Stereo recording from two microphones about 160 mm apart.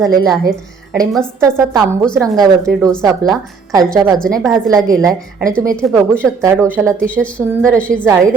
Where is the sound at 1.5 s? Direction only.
20° right (ahead or behind).